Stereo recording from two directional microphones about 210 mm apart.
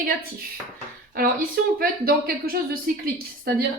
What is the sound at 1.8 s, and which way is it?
Speech, 45° right (ahead or behind).